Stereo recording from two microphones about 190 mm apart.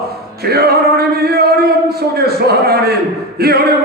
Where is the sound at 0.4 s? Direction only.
55° right (ahead or behind).